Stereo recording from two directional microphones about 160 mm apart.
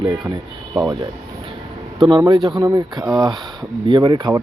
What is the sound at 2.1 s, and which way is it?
Speech, 30° right (ahead or behind).